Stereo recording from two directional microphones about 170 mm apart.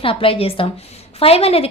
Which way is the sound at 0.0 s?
30° left (ahead or behind).